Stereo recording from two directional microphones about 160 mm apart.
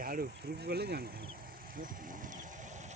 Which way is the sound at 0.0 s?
65° right (ahead or behind).